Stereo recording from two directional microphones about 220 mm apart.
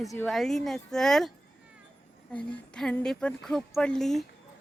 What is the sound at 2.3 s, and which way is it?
Speech, 5° left (ahead or behind).